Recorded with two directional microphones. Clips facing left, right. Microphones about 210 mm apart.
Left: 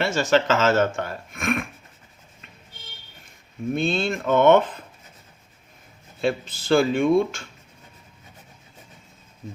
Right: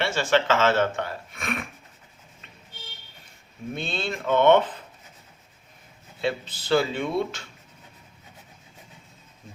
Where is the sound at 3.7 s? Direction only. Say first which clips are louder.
Left 7 dB; 45° left (ahead or behind).